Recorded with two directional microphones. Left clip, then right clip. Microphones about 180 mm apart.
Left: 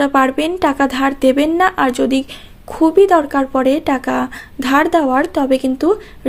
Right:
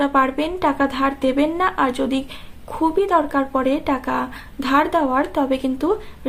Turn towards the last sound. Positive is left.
turn(degrees=30)  # may be behind; listen again after turning